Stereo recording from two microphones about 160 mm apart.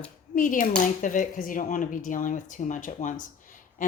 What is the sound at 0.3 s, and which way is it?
Speech, 55° left (ahead or behind).